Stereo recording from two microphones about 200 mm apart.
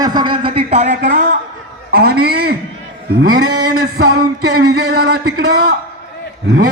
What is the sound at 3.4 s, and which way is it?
Speech, 90° right.